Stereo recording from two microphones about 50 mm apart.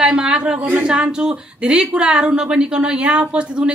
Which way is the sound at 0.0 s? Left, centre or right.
Centre.